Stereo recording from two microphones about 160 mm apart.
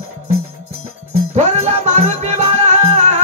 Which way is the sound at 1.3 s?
45° right (ahead or behind).